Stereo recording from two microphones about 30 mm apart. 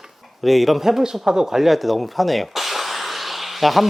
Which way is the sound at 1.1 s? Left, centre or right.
Centre.